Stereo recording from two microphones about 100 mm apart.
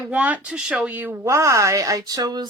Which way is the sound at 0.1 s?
15° right (ahead or behind).